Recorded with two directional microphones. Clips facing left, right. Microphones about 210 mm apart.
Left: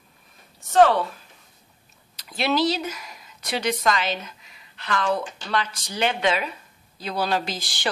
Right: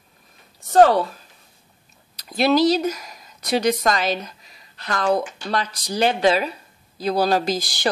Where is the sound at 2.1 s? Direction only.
40° right (ahead or behind).